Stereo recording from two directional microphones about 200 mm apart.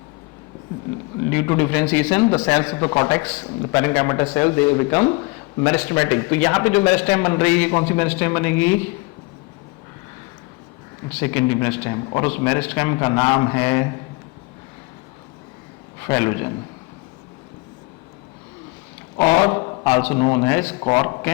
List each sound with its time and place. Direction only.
1.3 s speech: 10° left (ahead or behind)
5.0 s a sound: 20° left (ahead or behind)
5.7 s speech: 10° left (ahead or behind)
11.2 s speech: 10° left (ahead or behind)
16.0 s speech: 10° left (ahead or behind)
19.2 s speech: 20° left (ahead or behind)
20.1 s speech: 25° left (ahead or behind)
20.7 s speech: 25° left (ahead or behind)
21.1 s speech: 15° left (ahead or behind)